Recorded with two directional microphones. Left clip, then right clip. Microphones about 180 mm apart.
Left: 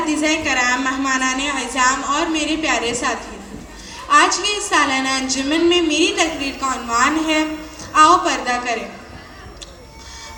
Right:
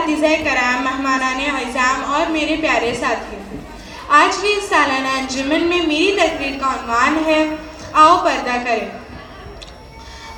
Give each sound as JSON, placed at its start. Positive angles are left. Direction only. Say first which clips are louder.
{"t": 0.1, "sound": "a woman's voice", "louder": "right 3 dB", "side_deg": -30}